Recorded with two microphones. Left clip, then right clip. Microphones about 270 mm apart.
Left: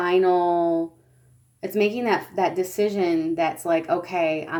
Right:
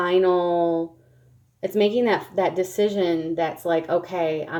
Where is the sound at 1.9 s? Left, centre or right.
Centre.